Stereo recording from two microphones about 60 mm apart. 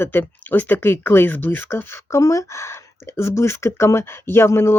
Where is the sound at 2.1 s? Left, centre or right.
Left.